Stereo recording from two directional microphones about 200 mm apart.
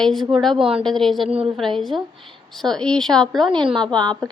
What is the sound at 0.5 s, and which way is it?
Speech, 25° right (ahead or behind).